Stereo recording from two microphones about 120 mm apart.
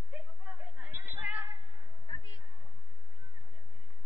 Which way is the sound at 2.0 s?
40° left (ahead or behind).